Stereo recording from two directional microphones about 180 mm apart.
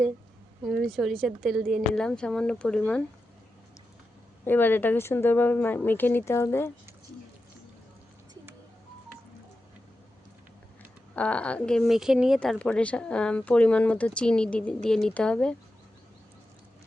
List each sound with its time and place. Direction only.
0.6 s speech: centre (ahead or behind)
4.4 s speech: 10° left (ahead or behind)
11.1 s speech: 5° left (ahead or behind)